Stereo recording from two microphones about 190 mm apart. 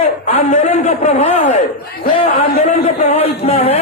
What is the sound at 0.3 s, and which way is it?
A man's voice, 40° left (ahead or behind).